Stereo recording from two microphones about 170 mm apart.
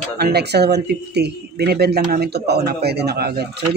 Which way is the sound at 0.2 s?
75° right (ahead or behind).